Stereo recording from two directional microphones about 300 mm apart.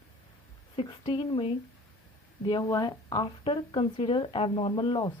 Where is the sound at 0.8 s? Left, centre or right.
Centre.